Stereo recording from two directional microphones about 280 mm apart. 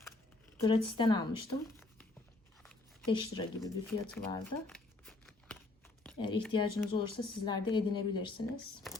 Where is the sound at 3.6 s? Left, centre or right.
Centre.